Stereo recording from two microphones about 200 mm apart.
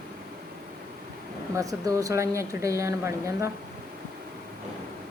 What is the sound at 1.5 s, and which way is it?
Speech, 15° right (ahead or behind).